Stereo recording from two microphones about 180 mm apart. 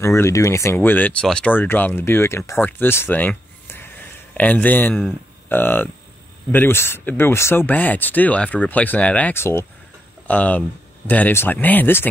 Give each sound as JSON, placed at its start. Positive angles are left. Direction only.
{"t": 0.0, "sound": "speech", "side_deg": 15}